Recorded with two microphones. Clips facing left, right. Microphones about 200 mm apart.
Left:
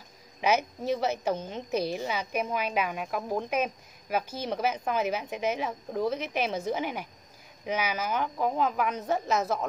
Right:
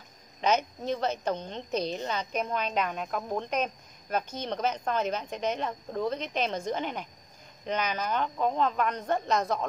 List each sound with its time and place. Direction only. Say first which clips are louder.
0.4 s a woman's voice: left 1 dB; 10° left (ahead or behind)